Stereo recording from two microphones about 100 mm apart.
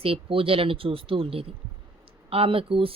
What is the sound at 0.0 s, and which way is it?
Speech, 70° right (ahead or behind).